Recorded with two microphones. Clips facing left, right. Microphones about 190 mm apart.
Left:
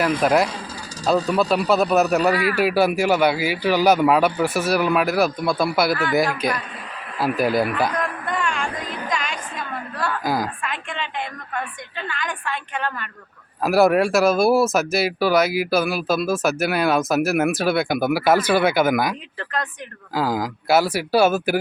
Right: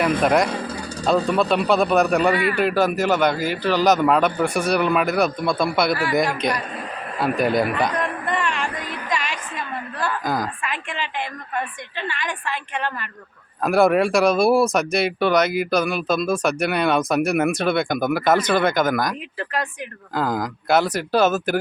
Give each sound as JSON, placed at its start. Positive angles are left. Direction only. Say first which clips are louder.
{"t": 0.0, "sound": "speech", "louder": "even", "side_deg": 0}
{"t": 7.2, "sound": "a sound", "louder": "even", "side_deg": 0}
{"t": 10.6, "sound": "a woman's voice", "louder": "even", "side_deg": -5}
{"t": 20.1, "sound": "speech", "louder": "left 1 dB", "side_deg": 5}